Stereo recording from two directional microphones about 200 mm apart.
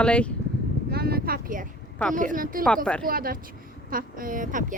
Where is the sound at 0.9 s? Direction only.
50° right (ahead or behind).